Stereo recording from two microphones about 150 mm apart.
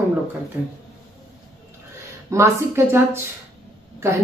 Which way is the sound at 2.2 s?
20° right (ahead or behind).